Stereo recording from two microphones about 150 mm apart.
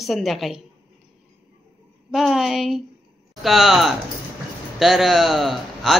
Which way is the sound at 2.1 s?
Centre (ahead or behind).